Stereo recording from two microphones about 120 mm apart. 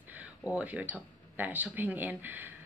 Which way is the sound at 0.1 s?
10° right (ahead or behind).